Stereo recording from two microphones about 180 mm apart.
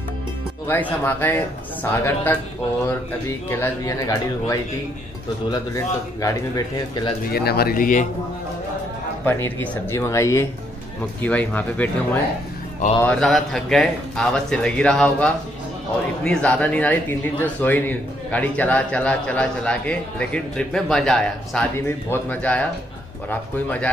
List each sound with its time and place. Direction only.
1.0 s a man's voice: 10° left (ahead or behind)
7.3 s speech: 60° left (ahead or behind)
9.2 s a man's voice: 10° left (ahead or behind)